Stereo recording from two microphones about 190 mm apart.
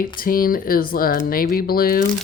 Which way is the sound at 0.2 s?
50° left (ahead or behind).